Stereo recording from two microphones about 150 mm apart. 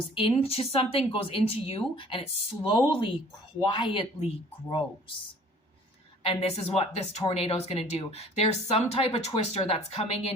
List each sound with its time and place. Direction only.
0.1 s speech: 35° left (ahead or behind)
6.2 s speech: 40° left (ahead or behind)